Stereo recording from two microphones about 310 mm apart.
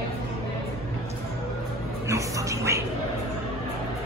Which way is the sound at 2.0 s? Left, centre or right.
Centre.